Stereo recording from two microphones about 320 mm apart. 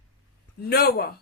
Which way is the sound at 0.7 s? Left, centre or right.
Left.